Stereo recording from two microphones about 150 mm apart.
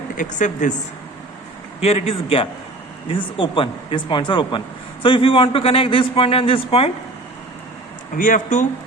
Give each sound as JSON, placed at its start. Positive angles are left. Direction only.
{"t": 0.2, "sound": "a woman's voice", "side_deg": 55}
{"t": 1.8, "sound": "a man's voice", "side_deg": 45}
{"t": 8.2, "sound": "a woman's voice", "side_deg": 60}